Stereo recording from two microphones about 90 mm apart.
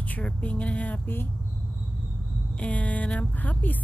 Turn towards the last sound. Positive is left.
turn(degrees=20)  # may be behind; listen again after turning